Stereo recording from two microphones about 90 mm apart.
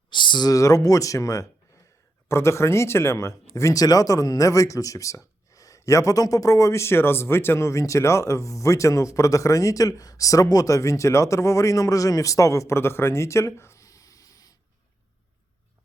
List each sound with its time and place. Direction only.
0.1 s speech: 60° left (ahead or behind)
0.5 s speech: 40° left (ahead or behind)